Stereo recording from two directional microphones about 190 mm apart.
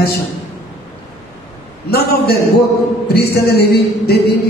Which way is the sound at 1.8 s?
55° left (ahead or behind).